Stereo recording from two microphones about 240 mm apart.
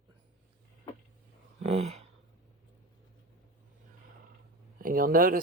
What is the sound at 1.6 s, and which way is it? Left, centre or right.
Speech, right.